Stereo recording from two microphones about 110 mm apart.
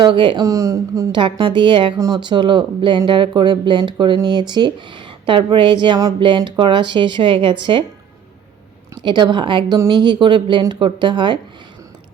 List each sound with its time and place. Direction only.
0.0 s speech: 45° right (ahead or behind)
0.4 s speech: 30° right (ahead or behind)
1.1 s speech: 50° right (ahead or behind)
9.0 s speech: 45° right (ahead or behind)